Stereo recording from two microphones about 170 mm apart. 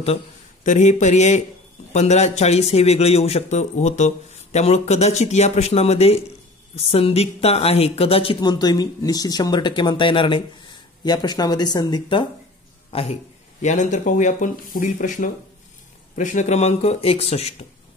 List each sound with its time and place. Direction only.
0.7 s a man's voice: 45° left (ahead or behind)